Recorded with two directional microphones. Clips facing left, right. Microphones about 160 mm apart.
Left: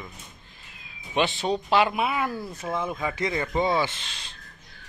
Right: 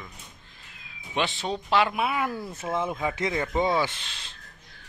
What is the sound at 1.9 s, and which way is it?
Speech, centre (ahead or behind).